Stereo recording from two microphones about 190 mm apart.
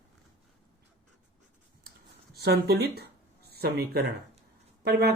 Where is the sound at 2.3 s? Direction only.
55° right (ahead or behind).